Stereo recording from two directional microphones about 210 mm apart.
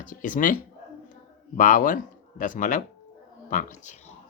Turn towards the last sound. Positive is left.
turn(degrees=35)  # may be behind; listen again after turning